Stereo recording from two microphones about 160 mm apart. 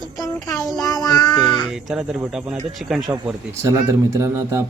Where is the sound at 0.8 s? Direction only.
20° left (ahead or behind).